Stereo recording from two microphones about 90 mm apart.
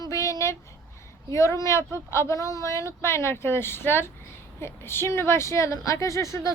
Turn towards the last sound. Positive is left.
turn(degrees=35)  # may be behind; listen again after turning